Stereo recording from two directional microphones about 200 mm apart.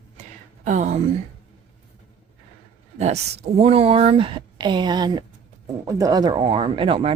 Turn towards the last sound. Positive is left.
turn(degrees=-30)  # may be behind; listen again after turning